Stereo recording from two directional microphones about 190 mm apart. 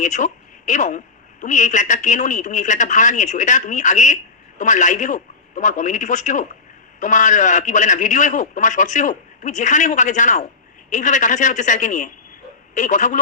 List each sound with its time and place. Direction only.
0.0 s a woman's voice: 40° left (ahead or behind)